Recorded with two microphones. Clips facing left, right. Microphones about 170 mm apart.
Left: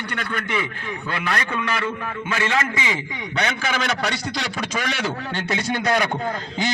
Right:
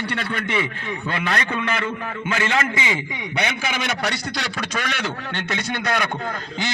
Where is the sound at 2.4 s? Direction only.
20° right (ahead or behind).